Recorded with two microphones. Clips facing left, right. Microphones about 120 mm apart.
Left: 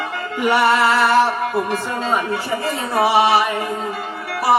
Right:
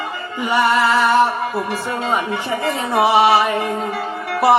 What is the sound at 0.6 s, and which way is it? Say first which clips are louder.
Music: right 1 dB; centre (ahead or behind).